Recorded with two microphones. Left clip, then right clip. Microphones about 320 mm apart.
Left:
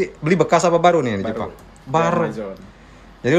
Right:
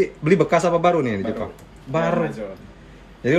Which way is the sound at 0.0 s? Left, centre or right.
Centre.